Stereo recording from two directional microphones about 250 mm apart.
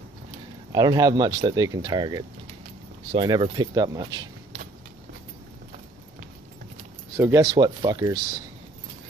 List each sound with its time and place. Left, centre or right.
0.7 s speech: centre
7.2 s speech: centre